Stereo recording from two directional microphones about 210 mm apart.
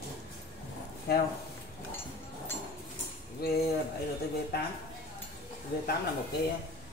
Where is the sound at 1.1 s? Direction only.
50° left (ahead or behind).